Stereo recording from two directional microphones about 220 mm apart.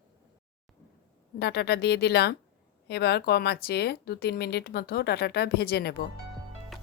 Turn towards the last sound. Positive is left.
turn(degrees=45)  # may be behind; listen again after turning